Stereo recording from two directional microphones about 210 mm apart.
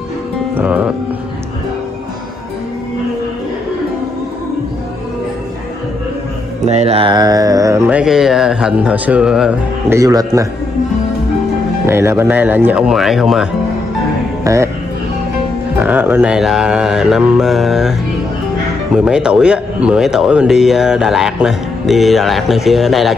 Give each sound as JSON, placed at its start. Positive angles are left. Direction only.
{"t": 0.6, "sound": "music", "side_deg": -5}
{"t": 6.6, "sound": "speech", "side_deg": -30}
{"t": 8.0, "sound": "speech", "side_deg": 0}
{"t": 11.8, "sound": "speech", "side_deg": -10}
{"t": 14.4, "sound": "speech", "side_deg": -15}
{"t": 15.8, "sound": "speech", "side_deg": -10}
{"t": 18.9, "sound": "speech", "side_deg": -5}